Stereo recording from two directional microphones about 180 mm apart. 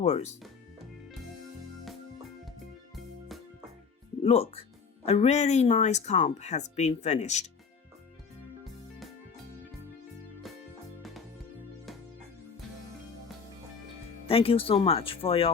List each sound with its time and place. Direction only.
0.0 s a woman's voice: 35° left (ahead or behind)
2.9 s music: centre (ahead or behind)
4.2 s a woman's voice: 35° left (ahead or behind)
8.6 s music: centre (ahead or behind)
14.3 s a woman's voice: 30° left (ahead or behind)